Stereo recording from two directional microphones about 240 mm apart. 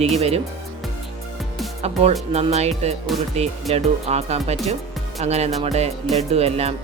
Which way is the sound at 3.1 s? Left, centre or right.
Centre.